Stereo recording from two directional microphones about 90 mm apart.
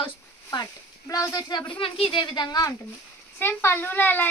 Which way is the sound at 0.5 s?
40° left (ahead or behind).